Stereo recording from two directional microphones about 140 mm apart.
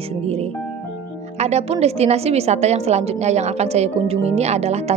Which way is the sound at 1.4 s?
50° right (ahead or behind).